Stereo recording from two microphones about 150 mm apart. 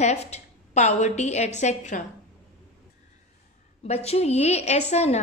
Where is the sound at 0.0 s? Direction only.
45° left (ahead or behind).